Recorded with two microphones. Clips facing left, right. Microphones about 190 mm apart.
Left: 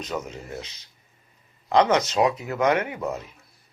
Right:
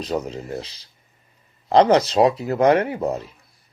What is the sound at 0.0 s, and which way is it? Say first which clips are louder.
Speech: right 6 dB; 35° right (ahead or behind).